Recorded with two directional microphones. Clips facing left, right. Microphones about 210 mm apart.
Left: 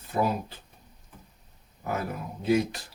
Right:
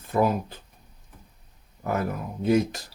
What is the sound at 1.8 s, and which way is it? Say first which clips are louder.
Speech: right 4 dB; 45° right (ahead or behind).